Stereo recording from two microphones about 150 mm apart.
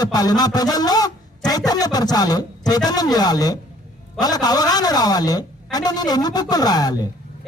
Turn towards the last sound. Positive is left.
turn(degrees=25)  # may be behind; listen again after turning